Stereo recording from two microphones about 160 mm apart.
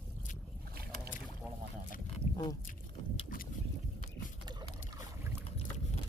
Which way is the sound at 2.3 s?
25° left (ahead or behind).